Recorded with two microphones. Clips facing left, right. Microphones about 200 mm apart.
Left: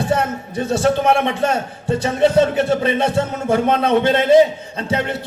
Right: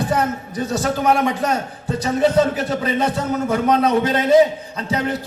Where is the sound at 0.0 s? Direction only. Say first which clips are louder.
Left 1 dB; 25° left (ahead or behind).